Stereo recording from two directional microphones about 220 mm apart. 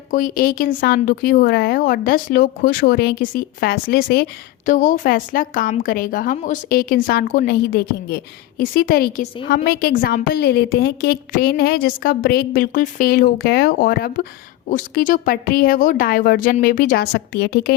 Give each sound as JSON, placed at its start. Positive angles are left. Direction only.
{"t": 0.1, "sound": "a woman's voice", "side_deg": 40}